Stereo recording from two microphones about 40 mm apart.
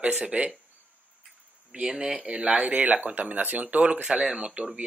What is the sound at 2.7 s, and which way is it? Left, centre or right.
Speech, right.